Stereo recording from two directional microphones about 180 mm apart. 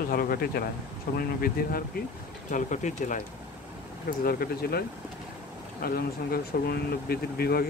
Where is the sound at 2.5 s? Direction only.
45° left (ahead or behind).